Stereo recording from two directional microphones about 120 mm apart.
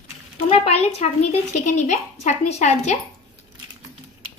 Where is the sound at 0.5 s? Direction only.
60° left (ahead or behind).